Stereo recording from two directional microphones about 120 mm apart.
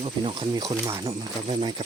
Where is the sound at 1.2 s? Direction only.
40° right (ahead or behind).